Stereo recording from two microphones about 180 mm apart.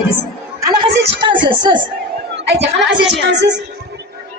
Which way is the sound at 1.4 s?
25° right (ahead or behind).